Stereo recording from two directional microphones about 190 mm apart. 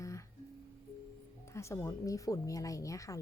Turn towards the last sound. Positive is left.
turn(degrees=15)  # may be behind; listen again after turning